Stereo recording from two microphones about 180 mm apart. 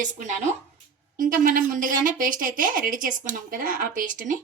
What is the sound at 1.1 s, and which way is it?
A woman's voice, 50° right (ahead or behind).